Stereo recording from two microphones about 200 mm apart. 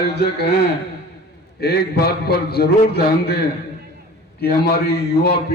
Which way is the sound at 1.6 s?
50° left (ahead or behind).